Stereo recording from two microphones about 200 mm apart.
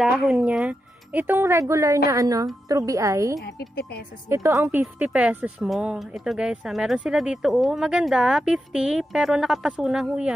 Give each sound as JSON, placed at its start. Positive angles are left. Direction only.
{"t": 0.2, "sound": "speech", "side_deg": -5}
{"t": 3.4, "sound": "speech", "side_deg": 50}
{"t": 4.3, "sound": "speech", "side_deg": -15}